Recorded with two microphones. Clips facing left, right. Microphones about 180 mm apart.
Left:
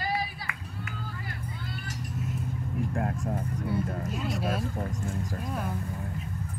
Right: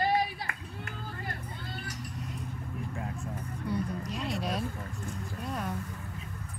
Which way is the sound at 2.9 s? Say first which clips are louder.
Left 7 dB; 55° left (ahead or behind).